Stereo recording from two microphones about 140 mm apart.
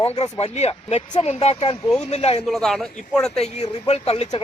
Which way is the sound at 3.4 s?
50° left (ahead or behind).